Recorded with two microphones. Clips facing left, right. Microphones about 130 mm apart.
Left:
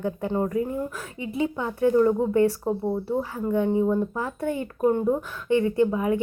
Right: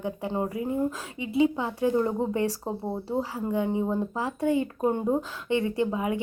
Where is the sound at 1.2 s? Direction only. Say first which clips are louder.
Right 3 dB; 20° right (ahead or behind).